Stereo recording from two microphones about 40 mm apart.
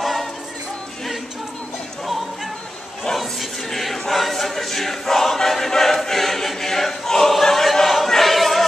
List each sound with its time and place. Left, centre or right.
0.0 s music: centre
3.2 s a sound: centre
4.1 s choir: centre